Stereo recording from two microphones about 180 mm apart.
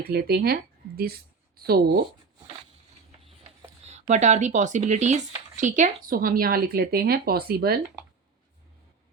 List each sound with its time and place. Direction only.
0.0 s speech: 60° right (ahead or behind)
3.8 s speech: 40° right (ahead or behind); by 7.8 s 60° right (ahead or behind)